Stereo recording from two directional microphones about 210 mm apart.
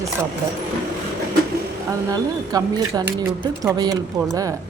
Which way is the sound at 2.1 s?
20° right (ahead or behind).